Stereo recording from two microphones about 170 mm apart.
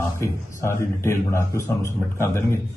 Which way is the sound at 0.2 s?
15° left (ahead or behind).